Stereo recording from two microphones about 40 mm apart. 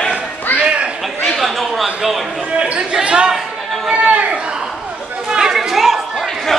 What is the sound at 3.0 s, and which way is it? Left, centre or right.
Chatter, right.